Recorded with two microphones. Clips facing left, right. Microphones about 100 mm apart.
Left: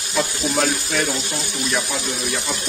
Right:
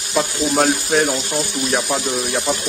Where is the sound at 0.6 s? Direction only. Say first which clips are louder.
Right 5 dB; 45° right (ahead or behind).